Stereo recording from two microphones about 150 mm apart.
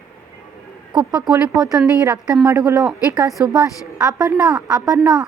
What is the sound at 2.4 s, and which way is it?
A woman's voice, 20° right (ahead or behind).